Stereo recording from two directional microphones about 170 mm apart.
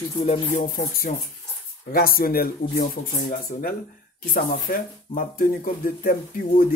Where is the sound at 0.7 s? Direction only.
60° left (ahead or behind).